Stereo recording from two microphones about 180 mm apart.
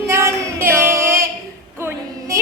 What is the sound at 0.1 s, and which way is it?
Child singing, 15° right (ahead or behind).